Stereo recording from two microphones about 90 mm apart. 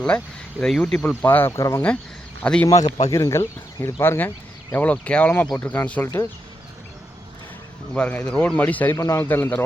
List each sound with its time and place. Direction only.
0.6 s speech: 5° left (ahead or behind)
1.2 s speech: 20° left (ahead or behind)
2.4 s a man's voice: 15° left (ahead or behind)
2.6 s speech: 40° left (ahead or behind)
4.7 s speech: 15° left (ahead or behind)
7.9 s speech: 15° left (ahead or behind)
9.0 s speech: 30° left (ahead or behind)